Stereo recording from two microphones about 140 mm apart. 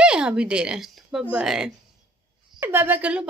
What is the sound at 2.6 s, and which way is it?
Speech, 15° right (ahead or behind).